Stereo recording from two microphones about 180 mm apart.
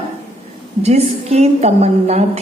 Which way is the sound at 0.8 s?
35° right (ahead or behind).